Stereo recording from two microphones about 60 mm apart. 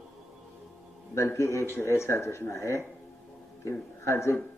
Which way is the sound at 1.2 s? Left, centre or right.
Left.